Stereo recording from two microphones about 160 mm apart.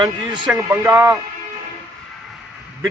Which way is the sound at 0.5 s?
20° right (ahead or behind).